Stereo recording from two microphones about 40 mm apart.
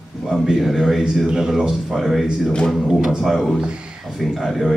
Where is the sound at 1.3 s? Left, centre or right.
Centre.